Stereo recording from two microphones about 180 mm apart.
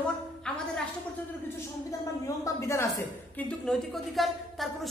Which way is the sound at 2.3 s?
15° left (ahead or behind).